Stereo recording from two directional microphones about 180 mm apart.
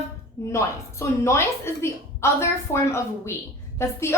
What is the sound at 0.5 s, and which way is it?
A woman's voice, 15° left (ahead or behind).